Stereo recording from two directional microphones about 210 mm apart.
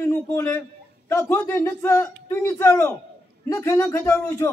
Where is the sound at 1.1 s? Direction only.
15° left (ahead or behind).